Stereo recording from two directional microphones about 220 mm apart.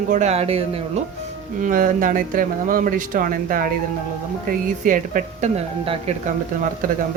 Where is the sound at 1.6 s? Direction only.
40° right (ahead or behind).